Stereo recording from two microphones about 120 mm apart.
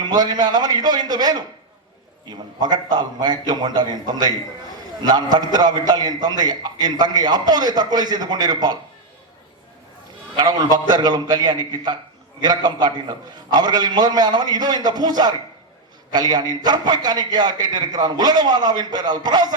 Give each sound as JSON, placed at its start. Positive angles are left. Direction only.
{"t": 0.0, "sound": "a man's voice", "side_deg": -35}
{"t": 10.3, "sound": "a man's voice", "side_deg": -35}